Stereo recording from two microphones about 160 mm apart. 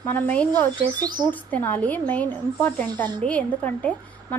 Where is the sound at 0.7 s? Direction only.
25° right (ahead or behind).